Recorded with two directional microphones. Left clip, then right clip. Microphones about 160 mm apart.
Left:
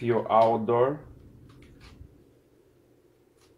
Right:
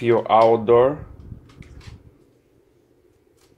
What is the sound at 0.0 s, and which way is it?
Speech, 85° right.